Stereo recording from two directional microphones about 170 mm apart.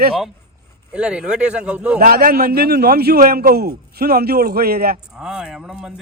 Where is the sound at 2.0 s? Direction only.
60° right (ahead or behind).